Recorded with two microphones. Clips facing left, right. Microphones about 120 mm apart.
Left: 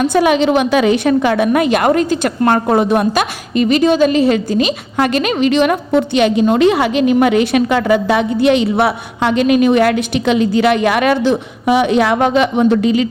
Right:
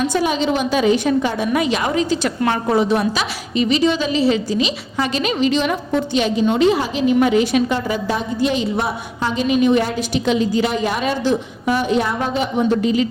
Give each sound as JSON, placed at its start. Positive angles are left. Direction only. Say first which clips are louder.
{"t": 0.0, "sound": "a woman's voice", "louder": "left 6 dB", "side_deg": 60}